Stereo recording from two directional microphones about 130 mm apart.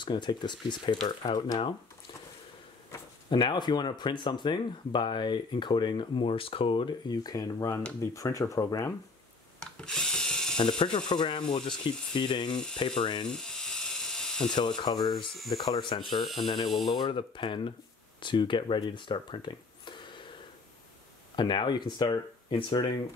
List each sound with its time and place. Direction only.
0.0 s speech: 35° left (ahead or behind)
3.3 s speech: 35° left (ahead or behind)
9.8 s ratchet: 5° left (ahead or behind)
11.1 s speech: 40° left (ahead or behind)
12.4 s speech: 5° left (ahead or behind)
13.0 s speech: 40° left (ahead or behind)
13.3 s ratchet: 5° left (ahead or behind)
14.8 s speech: 35° left (ahead or behind)
16.2 s speech: centre (ahead or behind)
16.8 s speech: 35° left (ahead or behind)
21.4 s speech: 35° left (ahead or behind)